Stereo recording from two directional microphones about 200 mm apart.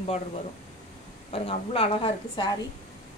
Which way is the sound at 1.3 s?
30° left (ahead or behind).